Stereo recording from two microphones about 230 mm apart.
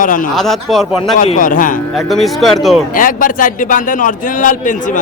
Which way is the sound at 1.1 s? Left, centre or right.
Left.